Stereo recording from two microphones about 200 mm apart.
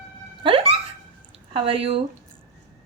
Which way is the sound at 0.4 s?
25° right (ahead or behind).